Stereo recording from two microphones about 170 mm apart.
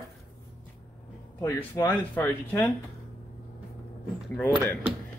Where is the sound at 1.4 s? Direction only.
15° left (ahead or behind).